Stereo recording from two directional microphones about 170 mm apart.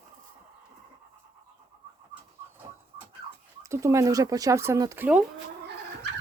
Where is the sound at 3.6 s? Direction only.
20° right (ahead or behind).